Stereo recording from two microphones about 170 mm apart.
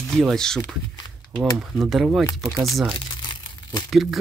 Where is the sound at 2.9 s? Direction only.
25° left (ahead or behind).